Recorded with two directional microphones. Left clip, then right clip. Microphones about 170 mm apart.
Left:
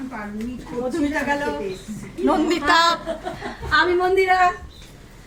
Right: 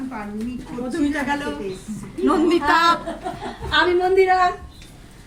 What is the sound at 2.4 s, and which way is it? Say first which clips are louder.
Speech: right 1 dB; 60° left (ahead or behind).